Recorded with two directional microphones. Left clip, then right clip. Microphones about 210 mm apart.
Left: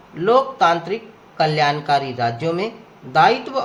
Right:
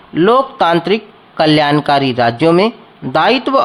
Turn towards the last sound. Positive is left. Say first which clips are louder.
# right 4 dB
turn(degrees=-40)  # may be behind; listen again after turning